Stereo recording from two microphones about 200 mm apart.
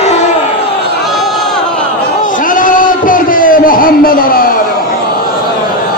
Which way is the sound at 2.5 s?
40° left (ahead or behind).